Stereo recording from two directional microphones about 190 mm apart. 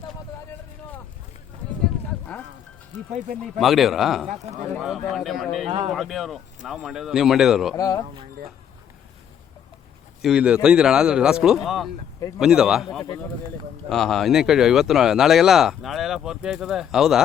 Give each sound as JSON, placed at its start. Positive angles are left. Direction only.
{"t": 3.6, "sound": "speech", "side_deg": 0}
{"t": 5.6, "sound": "speech", "side_deg": -30}
{"t": 5.9, "sound": "speech", "side_deg": 0}
{"t": 7.8, "sound": "speech", "side_deg": 20}
{"t": 10.2, "sound": "speech", "side_deg": -5}